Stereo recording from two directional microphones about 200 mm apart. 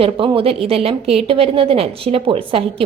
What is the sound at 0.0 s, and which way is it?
A woman's voice, 25° right (ahead or behind).